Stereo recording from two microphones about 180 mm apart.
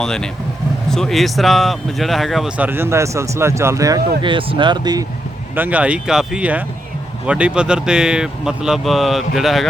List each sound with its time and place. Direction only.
0.0 s speech: 5° left (ahead or behind); by 5.0 s 25° right (ahead or behind)
5.5 s speech: 10° right (ahead or behind)